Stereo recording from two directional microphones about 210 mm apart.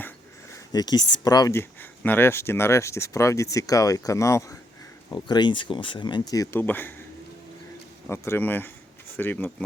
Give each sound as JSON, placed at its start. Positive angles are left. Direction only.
{"t": 0.5, "sound": "speech", "side_deg": 20}
{"t": 8.0, "sound": "speech", "side_deg": 10}